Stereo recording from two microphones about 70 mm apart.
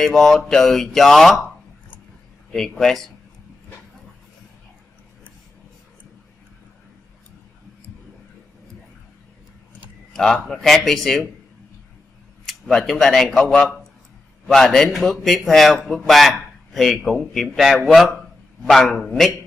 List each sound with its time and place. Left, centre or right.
0.0 s a man's voice: centre
2.5 s a man's voice: centre
10.1 s a man's voice: centre
12.4 s a man's voice: centre